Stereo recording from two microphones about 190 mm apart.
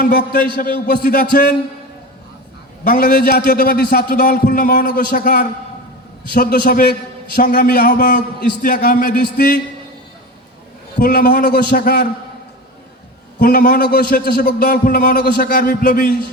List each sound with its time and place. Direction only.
0.0 s a man's voice: 50° left (ahead or behind)
2.8 s a man's voice: 50° left (ahead or behind)
10.9 s a man's voice: 50° left (ahead or behind)
13.4 s a man's voice: 45° left (ahead or behind)